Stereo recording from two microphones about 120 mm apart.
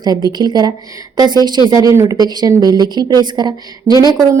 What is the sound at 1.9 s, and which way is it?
A woman's voice, 30° right (ahead or behind).